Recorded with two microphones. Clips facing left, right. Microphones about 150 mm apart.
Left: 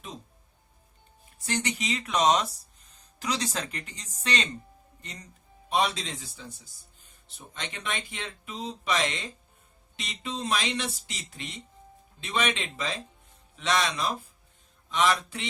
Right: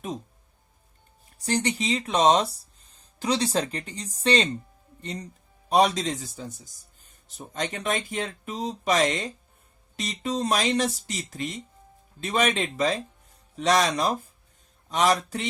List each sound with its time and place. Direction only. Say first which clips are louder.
1.4 s speech: right 5 dB; 35° right (ahead or behind)